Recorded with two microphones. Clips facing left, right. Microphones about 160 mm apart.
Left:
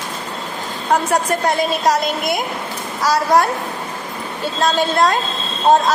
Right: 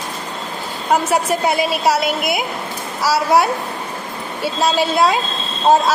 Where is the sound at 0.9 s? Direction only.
5° right (ahead or behind).